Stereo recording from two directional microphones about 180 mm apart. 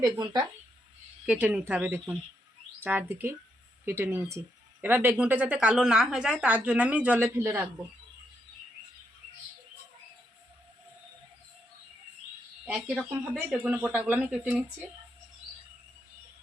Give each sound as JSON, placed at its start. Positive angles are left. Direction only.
{"t": 0.0, "sound": "speech", "side_deg": -25}
{"t": 1.2, "sound": "speech", "side_deg": -5}
{"t": 13.0, "sound": "speech", "side_deg": -5}